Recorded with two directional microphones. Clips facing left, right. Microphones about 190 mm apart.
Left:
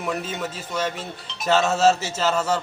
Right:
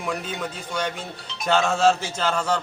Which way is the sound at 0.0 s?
5° left (ahead or behind).